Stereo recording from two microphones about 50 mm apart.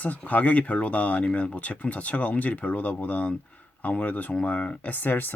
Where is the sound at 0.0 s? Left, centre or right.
Left.